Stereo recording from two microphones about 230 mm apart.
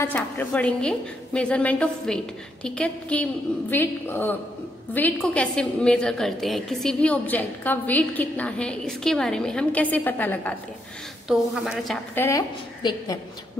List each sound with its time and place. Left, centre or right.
0.0 s a woman's voice: centre
12.2 s a woman's voice: centre